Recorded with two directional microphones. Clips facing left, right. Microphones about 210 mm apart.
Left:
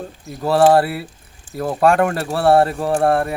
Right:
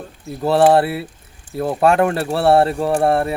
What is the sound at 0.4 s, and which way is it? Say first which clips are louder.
Speech: even; centre (ahead or behind).